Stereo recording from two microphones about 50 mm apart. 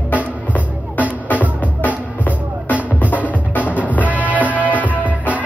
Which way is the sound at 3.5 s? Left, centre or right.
Left.